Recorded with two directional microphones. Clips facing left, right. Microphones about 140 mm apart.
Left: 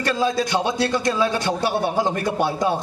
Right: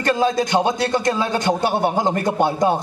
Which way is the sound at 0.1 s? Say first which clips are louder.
Right 4 dB; 20° right (ahead or behind).